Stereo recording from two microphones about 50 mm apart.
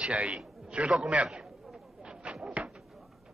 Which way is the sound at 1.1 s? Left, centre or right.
Right.